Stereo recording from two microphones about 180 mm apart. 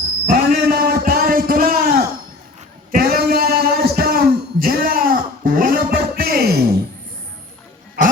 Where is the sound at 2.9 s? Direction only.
55° right (ahead or behind).